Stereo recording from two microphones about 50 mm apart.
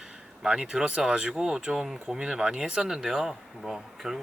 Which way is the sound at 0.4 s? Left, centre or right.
Centre.